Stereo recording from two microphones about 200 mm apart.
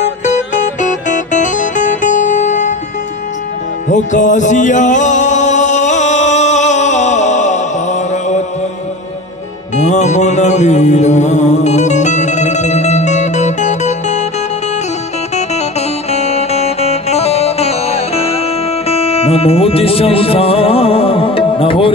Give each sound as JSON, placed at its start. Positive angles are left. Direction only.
{"t": 0.2, "sound": "music", "side_deg": 35}
{"t": 3.9, "sound": "music", "side_deg": 40}
{"t": 9.8, "sound": "music", "side_deg": 35}
{"t": 16.1, "sound": "music", "side_deg": 30}